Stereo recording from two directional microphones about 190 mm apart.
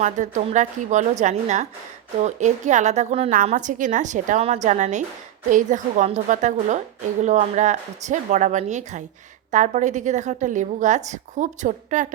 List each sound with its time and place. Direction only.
0.0 s a woman's voice: 40° right (ahead or behind)